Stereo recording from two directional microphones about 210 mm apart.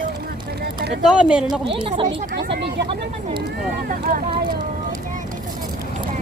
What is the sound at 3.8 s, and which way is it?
Speech, 45° right (ahead or behind).